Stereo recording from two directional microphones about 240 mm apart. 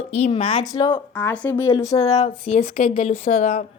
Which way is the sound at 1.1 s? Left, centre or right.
Centre.